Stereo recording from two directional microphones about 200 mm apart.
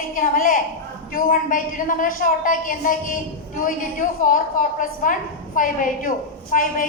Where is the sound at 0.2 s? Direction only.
40° left (ahead or behind).